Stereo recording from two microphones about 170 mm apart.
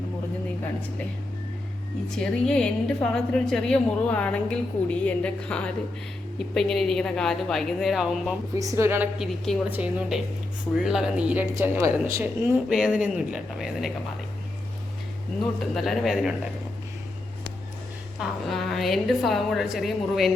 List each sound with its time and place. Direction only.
0.6 s speech: 10° left (ahead or behind)
2.0 s a woman's voice: 5° left (ahead or behind)
8.5 s a woman's voice: 20° right (ahead or behind)
9.1 s a woman's voice: centre (ahead or behind); by 12.5 s 15° right (ahead or behind)
12.6 s a woman's voice: 5° right (ahead or behind)
15.7 s a woman's voice: centre (ahead or behind)
18.2 s a woman's voice: centre (ahead or behind)